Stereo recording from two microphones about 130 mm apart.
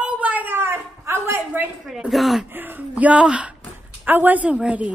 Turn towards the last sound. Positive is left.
turn(degrees=-10)  # may be behind; listen again after turning